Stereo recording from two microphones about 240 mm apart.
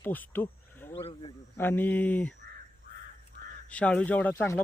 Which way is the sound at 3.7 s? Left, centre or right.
Centre.